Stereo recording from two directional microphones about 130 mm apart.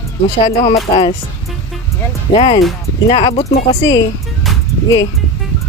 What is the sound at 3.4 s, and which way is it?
Speech, 30° left (ahead or behind).